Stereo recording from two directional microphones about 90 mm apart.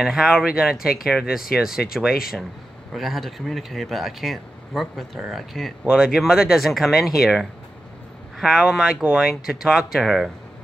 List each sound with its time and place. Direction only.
0.0 s speech: 5° right (ahead or behind)